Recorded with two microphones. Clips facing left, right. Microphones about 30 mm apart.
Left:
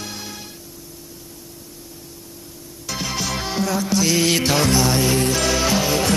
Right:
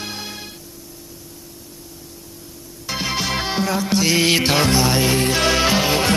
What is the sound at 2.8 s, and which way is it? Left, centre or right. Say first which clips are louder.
Music: right 3 dB; right.